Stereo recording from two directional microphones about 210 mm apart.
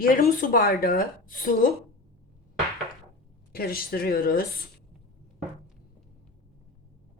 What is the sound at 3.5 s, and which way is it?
Speech, 45° left (ahead or behind).